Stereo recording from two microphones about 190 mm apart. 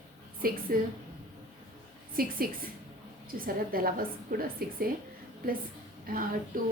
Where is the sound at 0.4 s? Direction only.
50° right (ahead or behind).